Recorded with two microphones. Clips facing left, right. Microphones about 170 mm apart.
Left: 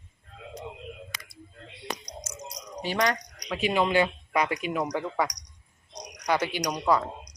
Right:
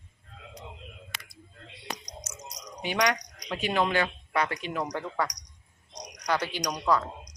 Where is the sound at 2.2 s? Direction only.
30° left (ahead or behind).